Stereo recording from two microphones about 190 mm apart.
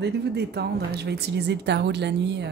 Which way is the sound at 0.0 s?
60° right (ahead or behind).